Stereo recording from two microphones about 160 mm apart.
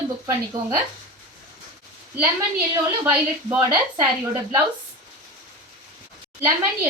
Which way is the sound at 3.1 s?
15° right (ahead or behind).